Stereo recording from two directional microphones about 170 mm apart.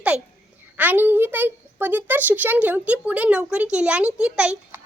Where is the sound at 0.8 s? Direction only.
10° right (ahead or behind).